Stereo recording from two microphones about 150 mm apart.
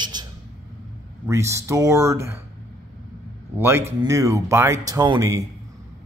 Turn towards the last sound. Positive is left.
turn(degrees=-25)  # may be behind; listen again after turning